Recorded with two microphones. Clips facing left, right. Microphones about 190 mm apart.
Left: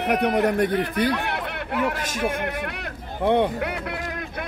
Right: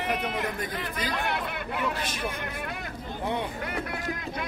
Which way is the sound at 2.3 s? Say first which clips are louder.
Left 7 dB; 65° left (ahead or behind).